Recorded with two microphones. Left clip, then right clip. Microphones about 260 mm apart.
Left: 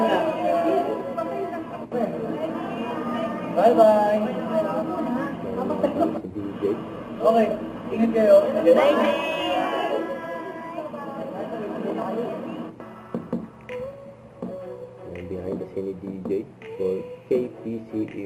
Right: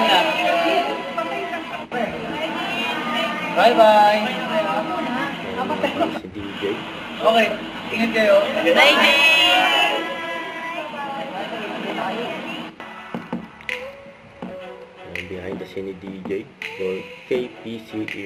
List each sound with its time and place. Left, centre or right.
0.0 s music: centre